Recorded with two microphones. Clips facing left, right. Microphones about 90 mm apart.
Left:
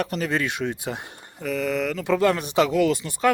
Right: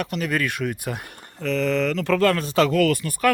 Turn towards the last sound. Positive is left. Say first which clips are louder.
# right 1 dB
turn(degrees=20)  # may be behind; listen again after turning